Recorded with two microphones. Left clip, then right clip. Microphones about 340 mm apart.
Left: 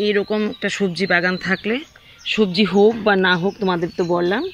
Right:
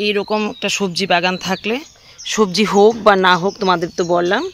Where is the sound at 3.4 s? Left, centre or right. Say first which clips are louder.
Right 3 dB; right.